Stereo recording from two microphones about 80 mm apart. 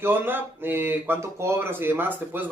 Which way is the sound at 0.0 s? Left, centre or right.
Right.